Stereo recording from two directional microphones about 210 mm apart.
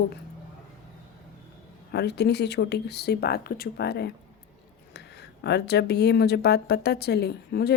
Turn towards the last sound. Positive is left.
turn(degrees=50)  # may be behind; listen again after turning